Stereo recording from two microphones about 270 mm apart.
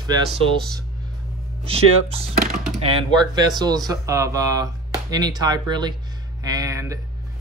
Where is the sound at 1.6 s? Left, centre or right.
Right.